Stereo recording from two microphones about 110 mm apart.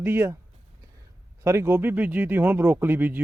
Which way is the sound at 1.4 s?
25° right (ahead or behind).